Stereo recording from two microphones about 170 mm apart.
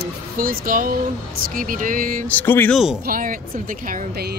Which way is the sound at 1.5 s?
55° right (ahead or behind).